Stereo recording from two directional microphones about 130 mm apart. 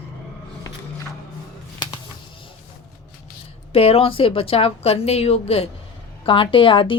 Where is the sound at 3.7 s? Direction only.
50° left (ahead or behind).